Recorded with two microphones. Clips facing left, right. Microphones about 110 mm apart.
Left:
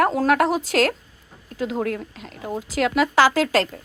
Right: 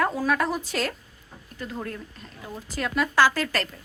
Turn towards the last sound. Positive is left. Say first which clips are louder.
# left 5 dB
turn(degrees=90)